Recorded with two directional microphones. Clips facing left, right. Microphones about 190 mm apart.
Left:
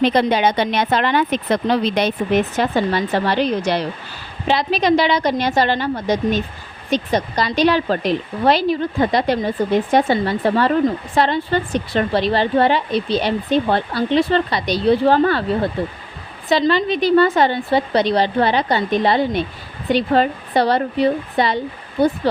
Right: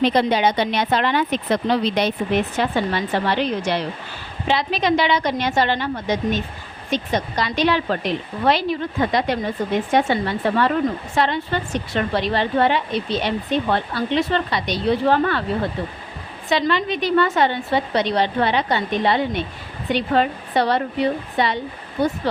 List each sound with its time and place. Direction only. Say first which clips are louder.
0.1 s a woman's voice: left 2 dB; 50° left (ahead or behind); by 15.4 s 35° left (ahead or behind)
16.5 s a woman's voice: left 4 dB; 35° left (ahead or behind)